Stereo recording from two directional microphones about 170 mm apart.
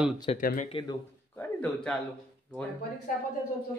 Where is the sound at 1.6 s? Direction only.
5° left (ahead or behind).